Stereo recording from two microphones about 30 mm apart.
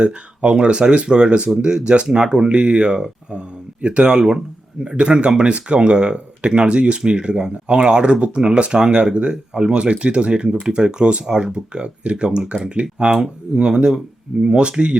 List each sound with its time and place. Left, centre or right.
0.0 s speech: right
4.0 s speech: right